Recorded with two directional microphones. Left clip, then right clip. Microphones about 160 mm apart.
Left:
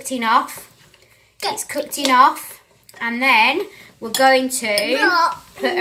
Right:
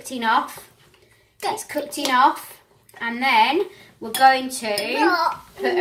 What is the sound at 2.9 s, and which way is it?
A woman's voice, 20° right (ahead or behind).